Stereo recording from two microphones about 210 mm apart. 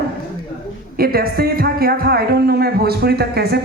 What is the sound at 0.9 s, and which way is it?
A woman's voice, 45° right (ahead or behind).